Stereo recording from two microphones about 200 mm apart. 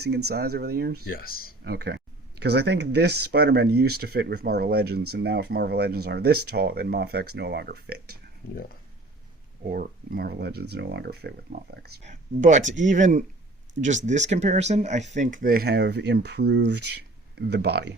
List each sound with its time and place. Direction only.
0.3 s speech: 50° right (ahead or behind)
1.0 s speech: 50° left (ahead or behind)
1.6 s speech: 55° right (ahead or behind)
9.7 s speech: 45° right (ahead or behind)
12.0 s speech: 35° right (ahead or behind); by 17.9 s 55° right (ahead or behind)